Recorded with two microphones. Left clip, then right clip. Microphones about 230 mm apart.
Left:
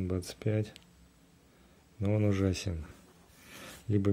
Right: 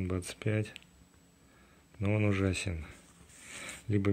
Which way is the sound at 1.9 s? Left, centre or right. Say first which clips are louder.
Even; centre.